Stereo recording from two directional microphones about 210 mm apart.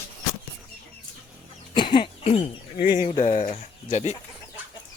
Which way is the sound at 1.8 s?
20° left (ahead or behind).